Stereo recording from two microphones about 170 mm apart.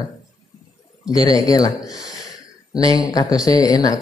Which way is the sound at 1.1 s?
20° left (ahead or behind).